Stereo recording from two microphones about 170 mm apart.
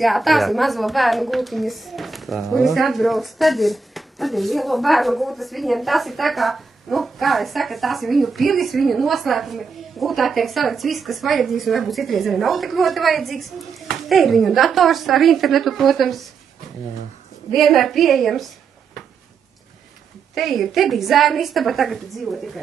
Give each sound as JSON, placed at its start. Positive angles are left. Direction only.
{"t": 0.0, "sound": "a woman's voice", "side_deg": 0}
{"t": 17.5, "sound": "a woman's voice", "side_deg": 0}
{"t": 20.3, "sound": "a woman's voice", "side_deg": 0}